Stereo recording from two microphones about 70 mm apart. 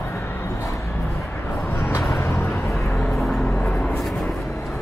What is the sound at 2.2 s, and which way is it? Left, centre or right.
Vehicle, left.